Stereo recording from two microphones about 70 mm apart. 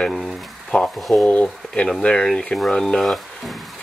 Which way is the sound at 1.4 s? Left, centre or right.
Centre.